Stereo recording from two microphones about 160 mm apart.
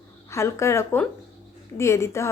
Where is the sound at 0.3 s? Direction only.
20° left (ahead or behind).